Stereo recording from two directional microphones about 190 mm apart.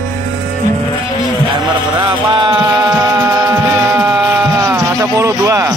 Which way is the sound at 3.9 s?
10° right (ahead or behind).